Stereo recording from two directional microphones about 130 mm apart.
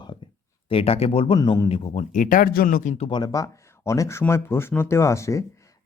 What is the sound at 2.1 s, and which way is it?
Speech, 90° left.